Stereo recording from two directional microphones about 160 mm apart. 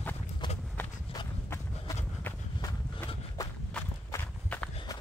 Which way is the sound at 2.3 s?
10° left (ahead or behind).